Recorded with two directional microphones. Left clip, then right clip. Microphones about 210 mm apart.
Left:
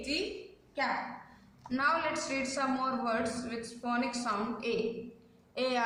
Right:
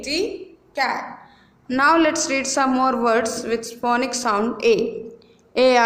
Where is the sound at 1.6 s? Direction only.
45° right (ahead or behind).